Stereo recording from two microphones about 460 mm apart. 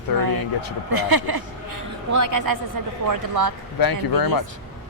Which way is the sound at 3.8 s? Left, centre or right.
Left.